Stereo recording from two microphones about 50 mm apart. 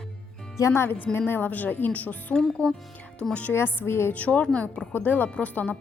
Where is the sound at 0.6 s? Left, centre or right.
Left.